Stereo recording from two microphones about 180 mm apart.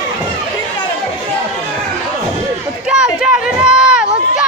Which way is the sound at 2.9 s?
5° right (ahead or behind).